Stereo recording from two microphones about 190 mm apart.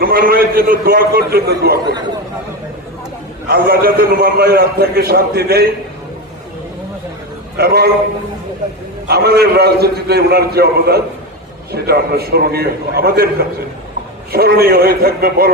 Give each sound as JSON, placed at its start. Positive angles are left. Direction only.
{"t": 0.0, "sound": "a man's voice", "side_deg": -50}
{"t": 3.5, "sound": "a man's voice", "side_deg": -55}
{"t": 7.5, "sound": "a man's voice", "side_deg": -60}
{"t": 9.0, "sound": "a man's voice", "side_deg": -60}
{"t": 14.3, "sound": "a man's voice", "side_deg": -55}